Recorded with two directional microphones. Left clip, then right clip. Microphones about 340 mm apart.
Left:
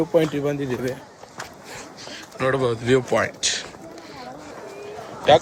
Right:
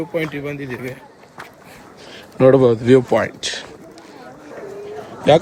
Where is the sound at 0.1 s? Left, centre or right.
Centre.